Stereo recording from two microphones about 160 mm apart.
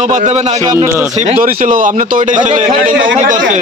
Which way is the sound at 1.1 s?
45° right (ahead or behind).